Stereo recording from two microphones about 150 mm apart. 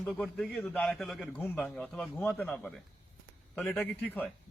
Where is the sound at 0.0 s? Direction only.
5° left (ahead or behind).